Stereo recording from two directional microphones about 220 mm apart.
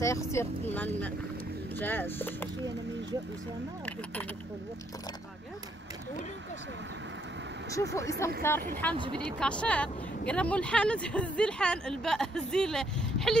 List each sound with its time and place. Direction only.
0.0 s speech: 15° left (ahead or behind)
7.7 s speech: 15° left (ahead or behind)
8.9 s speech: 20° right (ahead or behind)
9.4 s speech: 5° left (ahead or behind)